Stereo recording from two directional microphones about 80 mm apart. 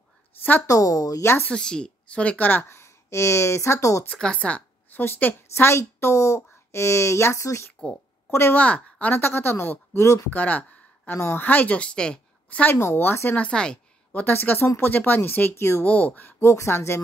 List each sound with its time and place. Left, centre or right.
0.4 s a woman's voice: left
0.7 s speech: left
1.5 s a woman's voice: centre; by 4.0 s left
4.2 s a woman's voice: centre; by 8.5 s left
8.5 s a woman's voice: centre
10.0 s speech: left
10.3 s speech: centre
11.1 s speech: left
11.4 s a woman's voice: left
12.7 s speech: left
13.4 s a woman's voice: centre
14.2 s a woman's voice: left
15.8 s speech: centre; by 17.0 s left